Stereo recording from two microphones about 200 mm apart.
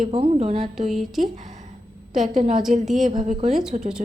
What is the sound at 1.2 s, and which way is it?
Speech, 40° right (ahead or behind).